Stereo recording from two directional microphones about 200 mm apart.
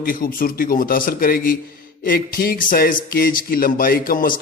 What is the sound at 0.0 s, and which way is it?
Speech, 45° left (ahead or behind).